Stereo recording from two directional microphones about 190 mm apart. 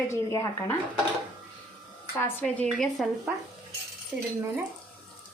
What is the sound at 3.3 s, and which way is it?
Speech, 5° right (ahead or behind).